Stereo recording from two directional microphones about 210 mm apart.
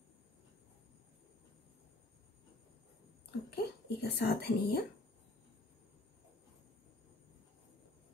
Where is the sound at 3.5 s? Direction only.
50° left (ahead or behind).